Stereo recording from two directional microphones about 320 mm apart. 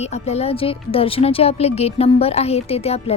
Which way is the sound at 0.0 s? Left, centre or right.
Centre.